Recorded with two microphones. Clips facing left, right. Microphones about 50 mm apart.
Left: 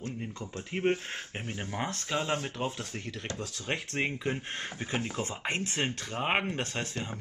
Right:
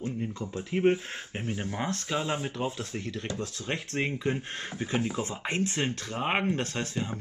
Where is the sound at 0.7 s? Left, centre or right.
Centre.